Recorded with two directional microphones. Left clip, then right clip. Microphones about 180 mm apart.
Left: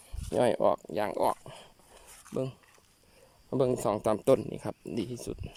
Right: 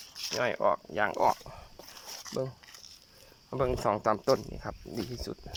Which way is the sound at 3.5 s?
25° left (ahead or behind).